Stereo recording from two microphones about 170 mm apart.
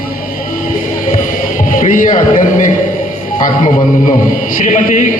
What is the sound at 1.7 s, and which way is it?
A man's voice, 50° left (ahead or behind).